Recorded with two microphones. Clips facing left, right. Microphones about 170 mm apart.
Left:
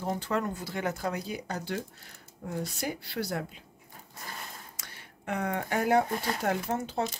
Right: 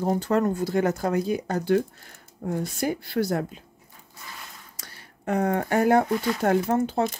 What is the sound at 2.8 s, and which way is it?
Speech, 50° right (ahead or behind).